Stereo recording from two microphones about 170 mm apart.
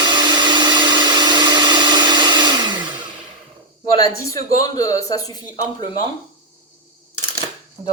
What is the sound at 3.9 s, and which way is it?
Speech, 20° left (ahead or behind).